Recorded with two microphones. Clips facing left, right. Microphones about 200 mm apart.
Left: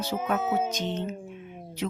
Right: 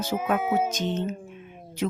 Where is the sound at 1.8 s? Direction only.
50° right (ahead or behind).